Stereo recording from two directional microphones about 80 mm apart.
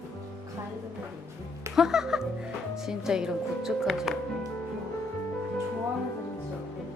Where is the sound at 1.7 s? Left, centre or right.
Centre.